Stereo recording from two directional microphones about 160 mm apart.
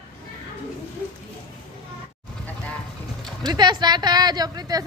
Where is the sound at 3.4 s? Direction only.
25° right (ahead or behind).